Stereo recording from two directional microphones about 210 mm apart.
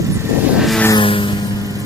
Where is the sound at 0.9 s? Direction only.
25° left (ahead or behind).